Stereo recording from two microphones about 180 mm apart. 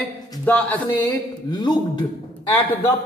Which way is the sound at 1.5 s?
25° left (ahead or behind).